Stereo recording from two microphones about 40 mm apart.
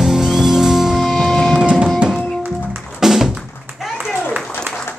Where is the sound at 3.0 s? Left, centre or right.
Centre.